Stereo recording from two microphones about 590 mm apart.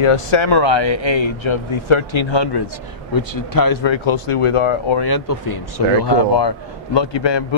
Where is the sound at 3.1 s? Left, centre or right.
Left.